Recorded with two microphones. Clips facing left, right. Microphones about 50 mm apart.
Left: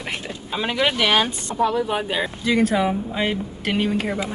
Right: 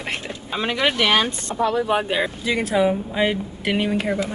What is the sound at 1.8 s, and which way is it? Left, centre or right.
Speech, centre.